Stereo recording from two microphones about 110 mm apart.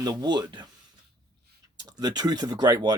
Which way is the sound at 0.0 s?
35° right (ahead or behind).